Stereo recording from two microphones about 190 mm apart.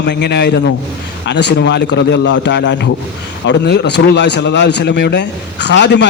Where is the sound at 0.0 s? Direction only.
65° left (ahead or behind).